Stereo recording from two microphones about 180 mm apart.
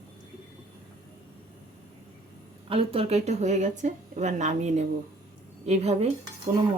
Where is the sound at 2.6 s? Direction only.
30° right (ahead or behind).